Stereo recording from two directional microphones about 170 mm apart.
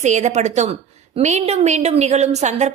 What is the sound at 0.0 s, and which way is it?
A woman's voice, 45° right (ahead or behind).